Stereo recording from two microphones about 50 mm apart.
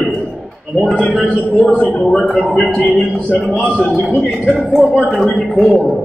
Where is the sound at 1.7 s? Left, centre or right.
Left.